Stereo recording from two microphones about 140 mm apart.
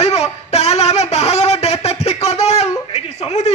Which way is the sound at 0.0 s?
50° left (ahead or behind).